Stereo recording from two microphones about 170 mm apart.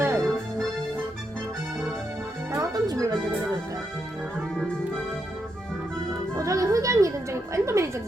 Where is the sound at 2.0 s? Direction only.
15° right (ahead or behind).